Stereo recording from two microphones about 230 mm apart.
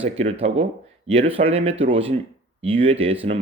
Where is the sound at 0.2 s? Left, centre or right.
Right.